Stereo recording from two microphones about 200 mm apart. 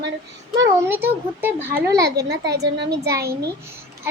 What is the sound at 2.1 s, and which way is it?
Speech, 55° right (ahead or behind).